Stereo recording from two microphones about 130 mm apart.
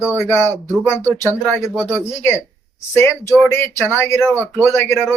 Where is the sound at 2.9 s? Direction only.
20° left (ahead or behind).